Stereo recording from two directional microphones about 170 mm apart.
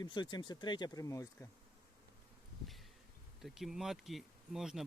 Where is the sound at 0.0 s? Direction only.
25° left (ahead or behind).